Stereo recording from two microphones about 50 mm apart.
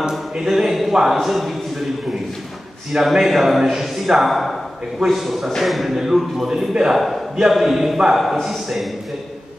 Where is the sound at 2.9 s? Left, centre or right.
Centre.